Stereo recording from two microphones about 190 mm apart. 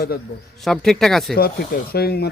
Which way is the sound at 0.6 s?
Centre (ahead or behind).